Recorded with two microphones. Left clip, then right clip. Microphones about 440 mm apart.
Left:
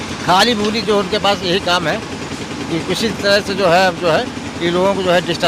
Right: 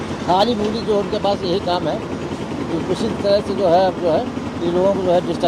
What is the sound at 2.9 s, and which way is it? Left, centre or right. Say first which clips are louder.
Speech: left 3 dB; left.